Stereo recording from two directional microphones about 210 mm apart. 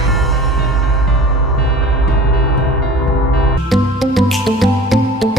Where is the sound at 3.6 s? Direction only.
Centre (ahead or behind).